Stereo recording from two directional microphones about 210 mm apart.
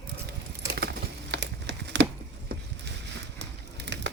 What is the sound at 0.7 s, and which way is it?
Crumpling, 50° right (ahead or behind).